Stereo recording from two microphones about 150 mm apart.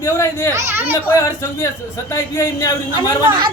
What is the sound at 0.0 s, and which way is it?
Speech, 20° left (ahead or behind).